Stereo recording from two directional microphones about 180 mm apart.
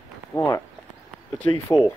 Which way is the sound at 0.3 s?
15° left (ahead or behind).